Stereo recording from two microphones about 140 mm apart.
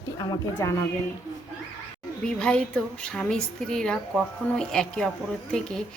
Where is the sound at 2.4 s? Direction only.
5° left (ahead or behind).